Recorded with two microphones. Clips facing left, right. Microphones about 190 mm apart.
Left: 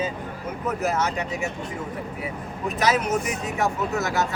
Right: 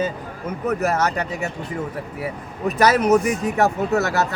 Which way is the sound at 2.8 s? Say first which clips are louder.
Right 7 dB; 65° right (ahead or behind).